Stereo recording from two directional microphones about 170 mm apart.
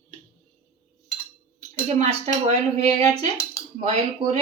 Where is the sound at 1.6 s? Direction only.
40° right (ahead or behind).